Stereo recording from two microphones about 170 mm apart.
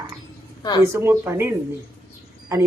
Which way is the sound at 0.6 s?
25° left (ahead or behind).